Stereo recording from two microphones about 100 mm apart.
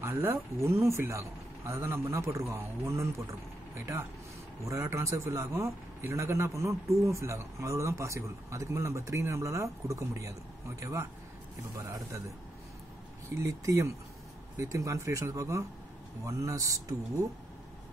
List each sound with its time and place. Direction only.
0.0 s a man's voice: 25° right (ahead or behind)
13.4 s speech: 30° right (ahead or behind)